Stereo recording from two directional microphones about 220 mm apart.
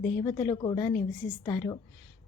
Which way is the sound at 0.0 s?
20° left (ahead or behind).